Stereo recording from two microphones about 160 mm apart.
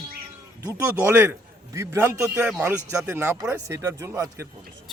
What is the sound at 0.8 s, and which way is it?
Speech, 10° right (ahead or behind).